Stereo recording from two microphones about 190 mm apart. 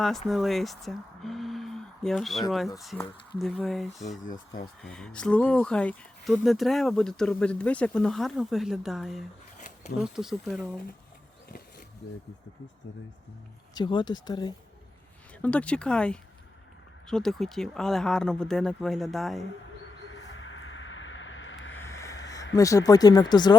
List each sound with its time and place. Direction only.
0.3 s speech: centre (ahead or behind)
4.2 s speech: 45° left (ahead or behind)
4.8 s speech: 5° left (ahead or behind)
13.7 s speech: 25° left (ahead or behind)
15.4 s speech: 5° left (ahead or behind)
20.1 s a sound: 80° left
21.8 s a sound: 15° left (ahead or behind)
22.5 s speech: 15° left (ahead or behind)